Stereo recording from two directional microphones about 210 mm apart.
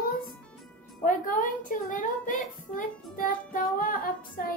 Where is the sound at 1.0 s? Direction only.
40° left (ahead or behind).